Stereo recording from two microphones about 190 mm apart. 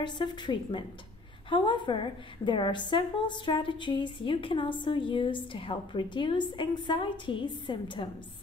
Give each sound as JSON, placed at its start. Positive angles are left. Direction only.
{"t": 0.0, "sound": "a woman's voice", "side_deg": 25}